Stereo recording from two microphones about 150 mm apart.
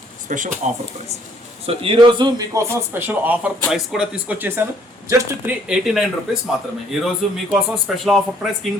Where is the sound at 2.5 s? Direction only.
15° right (ahead or behind).